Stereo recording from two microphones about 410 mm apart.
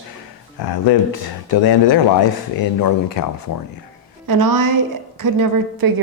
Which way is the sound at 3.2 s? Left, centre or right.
Left.